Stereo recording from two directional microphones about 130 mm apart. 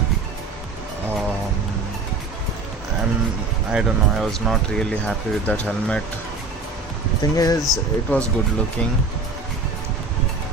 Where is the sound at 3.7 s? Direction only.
Centre (ahead or behind).